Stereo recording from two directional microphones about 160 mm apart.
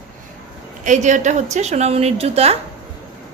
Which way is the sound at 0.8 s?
50° right (ahead or behind).